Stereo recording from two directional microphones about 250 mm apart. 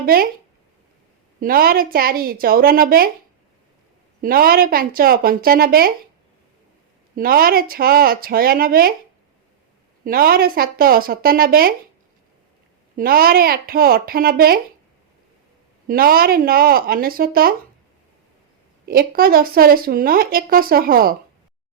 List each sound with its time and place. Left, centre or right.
0.0 s speech: right
1.4 s speech: right
4.2 s speech: right
7.2 s speech: right
10.0 s speech: right
13.0 s speech: right
15.9 s speech: right
18.9 s speech: right